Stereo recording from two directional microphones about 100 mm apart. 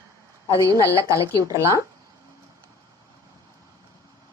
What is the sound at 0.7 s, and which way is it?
Speech, 35° right (ahead or behind).